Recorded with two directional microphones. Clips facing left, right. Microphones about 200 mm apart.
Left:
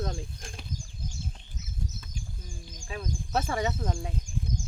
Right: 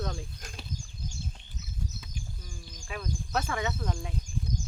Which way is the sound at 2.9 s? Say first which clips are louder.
Left 2 dB; 25° left (ahead or behind).